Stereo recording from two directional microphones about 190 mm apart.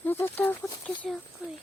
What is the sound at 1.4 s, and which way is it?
Speech, 5° right (ahead or behind).